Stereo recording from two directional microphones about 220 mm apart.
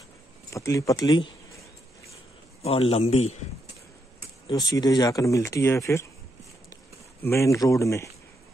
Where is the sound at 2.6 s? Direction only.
25° left (ahead or behind).